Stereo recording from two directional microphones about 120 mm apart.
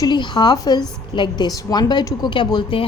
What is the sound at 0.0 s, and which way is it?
A woman's voice, 40° left (ahead or behind).